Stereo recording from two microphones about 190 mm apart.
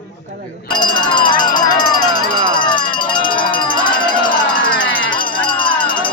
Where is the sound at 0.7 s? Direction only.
25° left (ahead or behind).